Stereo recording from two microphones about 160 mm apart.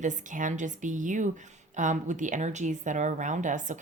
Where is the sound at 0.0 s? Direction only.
50° right (ahead or behind).